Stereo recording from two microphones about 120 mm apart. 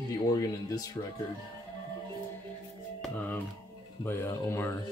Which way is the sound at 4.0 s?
20° left (ahead or behind).